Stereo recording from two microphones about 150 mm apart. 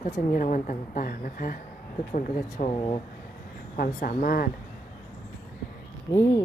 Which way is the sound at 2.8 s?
35° left (ahead or behind).